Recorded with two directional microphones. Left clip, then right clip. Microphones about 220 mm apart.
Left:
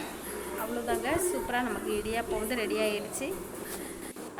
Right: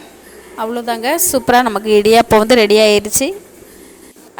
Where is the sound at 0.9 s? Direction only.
50° right (ahead or behind).